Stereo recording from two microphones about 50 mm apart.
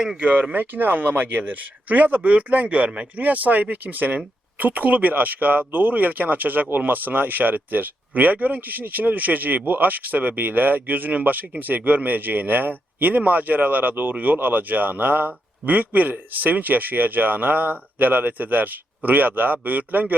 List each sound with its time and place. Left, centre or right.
0.2 s speech: right
0.5 s speech: right